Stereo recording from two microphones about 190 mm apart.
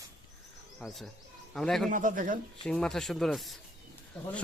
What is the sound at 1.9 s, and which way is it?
Speech, 45° right (ahead or behind).